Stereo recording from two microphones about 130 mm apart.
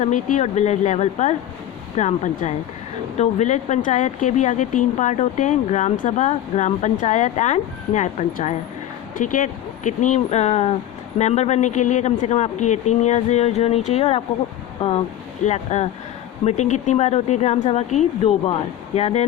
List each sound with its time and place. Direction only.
0.0 s speech: 70° left (ahead or behind)
9.1 s speech: 90° left; by 19.2 s 50° left (ahead or behind)